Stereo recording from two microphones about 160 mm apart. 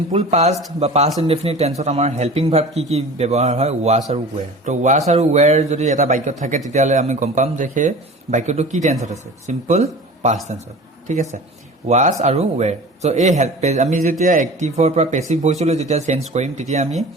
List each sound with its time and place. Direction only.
0.3 s a man's voice: 45° right (ahead or behind)